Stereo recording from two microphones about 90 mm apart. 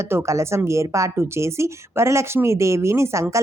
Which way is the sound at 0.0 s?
30° right (ahead or behind).